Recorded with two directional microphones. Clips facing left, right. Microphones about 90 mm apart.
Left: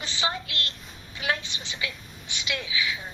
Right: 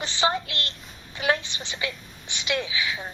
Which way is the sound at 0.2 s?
40° right (ahead or behind).